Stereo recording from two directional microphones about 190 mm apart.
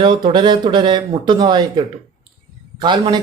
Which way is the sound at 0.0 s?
25° right (ahead or behind).